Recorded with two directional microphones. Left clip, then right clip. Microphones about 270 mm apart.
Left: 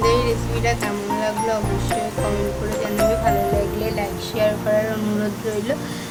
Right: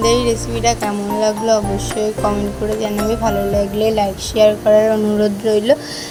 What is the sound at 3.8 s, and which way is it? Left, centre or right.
A woman's voice, right.